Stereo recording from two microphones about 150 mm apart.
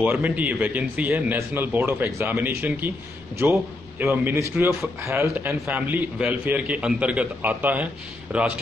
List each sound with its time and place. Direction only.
0.0 s a man's voice: 10° right (ahead or behind)